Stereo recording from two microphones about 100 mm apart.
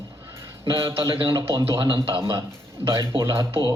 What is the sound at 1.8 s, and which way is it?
Mantra, 55° right (ahead or behind).